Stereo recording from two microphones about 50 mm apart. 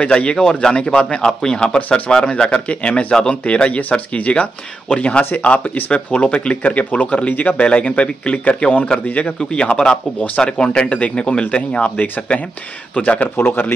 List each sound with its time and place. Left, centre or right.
0.0 s speech: left
1.8 s a man's voice: left
2.0 s a man's voice: centre